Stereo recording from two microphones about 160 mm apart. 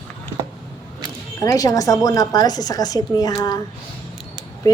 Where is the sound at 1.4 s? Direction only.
20° left (ahead or behind).